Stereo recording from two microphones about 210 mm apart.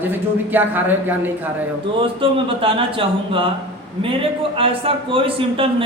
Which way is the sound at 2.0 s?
25° right (ahead or behind).